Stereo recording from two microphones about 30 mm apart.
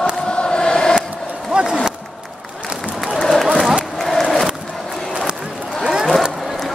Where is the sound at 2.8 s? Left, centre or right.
Centre.